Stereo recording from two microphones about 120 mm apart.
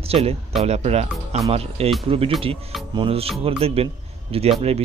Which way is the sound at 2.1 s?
50° right (ahead or behind).